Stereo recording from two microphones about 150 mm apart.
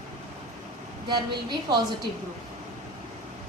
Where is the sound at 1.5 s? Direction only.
30° right (ahead or behind).